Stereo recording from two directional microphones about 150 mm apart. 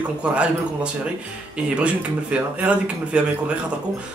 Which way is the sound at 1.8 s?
10° right (ahead or behind).